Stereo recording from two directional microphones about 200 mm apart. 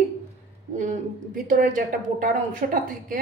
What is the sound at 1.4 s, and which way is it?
A woman's voice, 40° right (ahead or behind).